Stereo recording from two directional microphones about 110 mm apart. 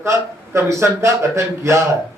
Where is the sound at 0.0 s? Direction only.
25° right (ahead or behind).